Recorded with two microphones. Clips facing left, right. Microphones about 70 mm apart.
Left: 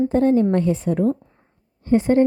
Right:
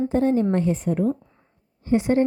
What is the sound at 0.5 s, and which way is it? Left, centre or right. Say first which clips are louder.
Speech: left 2 dB; left.